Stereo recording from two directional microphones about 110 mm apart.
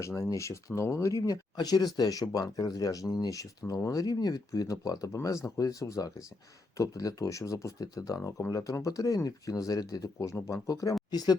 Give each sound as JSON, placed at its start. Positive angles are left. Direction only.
{"t": 0.0, "sound": "speech", "side_deg": 30}